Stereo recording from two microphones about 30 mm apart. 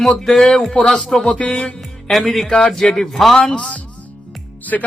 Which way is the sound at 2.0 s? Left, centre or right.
Centre.